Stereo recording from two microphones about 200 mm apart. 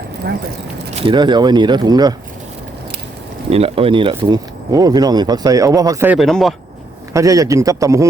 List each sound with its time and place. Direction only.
0.9 s speech: 25° right (ahead or behind)
3.5 s speech: 30° right (ahead or behind); by 6.1 s 15° right (ahead or behind)
6.1 s speech: centre (ahead or behind)
7.1 s a man's voice: 15° right (ahead or behind)